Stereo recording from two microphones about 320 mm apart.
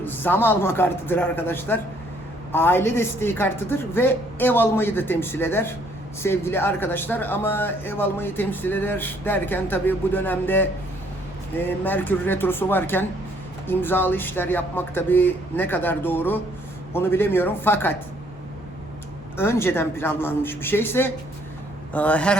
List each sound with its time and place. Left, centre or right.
0.0 s speech: centre
11.8 s speech: centre
19.4 s speech: centre
21.9 s a sound: centre